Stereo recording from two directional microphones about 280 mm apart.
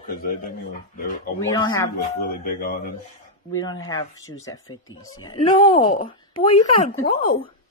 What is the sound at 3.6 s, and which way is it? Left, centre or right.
Speech, centre.